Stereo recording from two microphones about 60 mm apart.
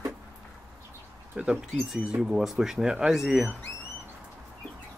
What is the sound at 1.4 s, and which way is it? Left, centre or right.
Speech, centre.